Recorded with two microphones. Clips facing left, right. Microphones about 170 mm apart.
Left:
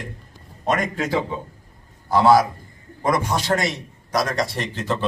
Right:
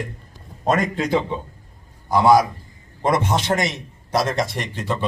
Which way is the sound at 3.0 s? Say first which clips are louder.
Right 2 dB; 25° right (ahead or behind).